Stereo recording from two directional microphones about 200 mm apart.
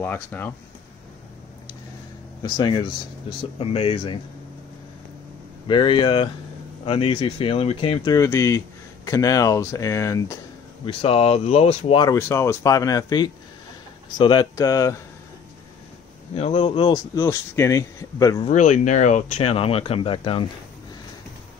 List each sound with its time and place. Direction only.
0.0 s speech: 10° left (ahead or behind)
2.4 s speech: 20° left (ahead or behind)
5.7 s speech: 25° left (ahead or behind)
10.9 s speech: 30° left (ahead or behind)
16.3 s speech: 30° left (ahead or behind)
18.4 s speech: 35° left (ahead or behind)